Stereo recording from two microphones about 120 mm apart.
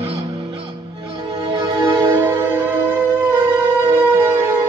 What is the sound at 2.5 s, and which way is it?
Music, 20° right (ahead or behind).